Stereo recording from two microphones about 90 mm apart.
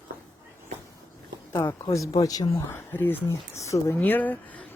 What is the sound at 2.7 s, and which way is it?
Speech, 25° left (ahead or behind).